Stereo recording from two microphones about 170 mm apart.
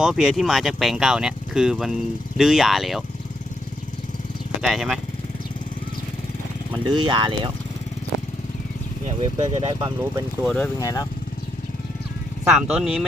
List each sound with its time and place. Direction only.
0.0 s speech: centre (ahead or behind)
4.6 s speech: centre (ahead or behind)
6.7 s speech: 30° right (ahead or behind)
9.6 s speech: 20° right (ahead or behind)
10.4 s speech: 10° left (ahead or behind)
10.8 s speech: 20° left (ahead or behind)
12.5 s speech: 5° right (ahead or behind)